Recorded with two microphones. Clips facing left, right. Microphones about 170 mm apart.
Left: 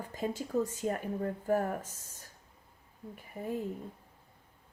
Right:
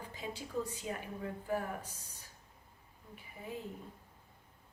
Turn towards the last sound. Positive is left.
turn(degrees=45)  # may be behind; listen again after turning